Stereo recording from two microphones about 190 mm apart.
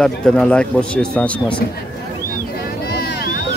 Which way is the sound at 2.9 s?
55° left (ahead or behind).